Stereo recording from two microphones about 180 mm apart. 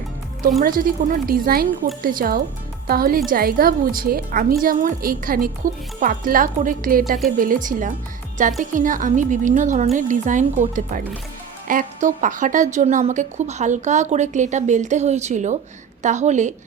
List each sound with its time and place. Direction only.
0.6 s a woman's voice: 50° right (ahead or behind)